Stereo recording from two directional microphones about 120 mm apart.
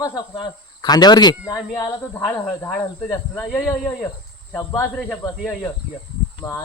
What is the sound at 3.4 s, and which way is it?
A man's voice, 15° left (ahead or behind).